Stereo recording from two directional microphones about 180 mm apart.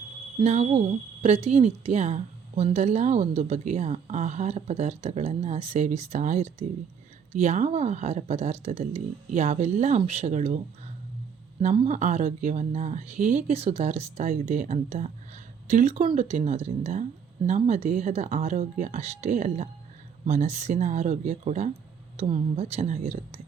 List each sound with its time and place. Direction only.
0.3 s a woman's voice: 40° right (ahead or behind)
11.6 s a woman's voice: 40° right (ahead or behind)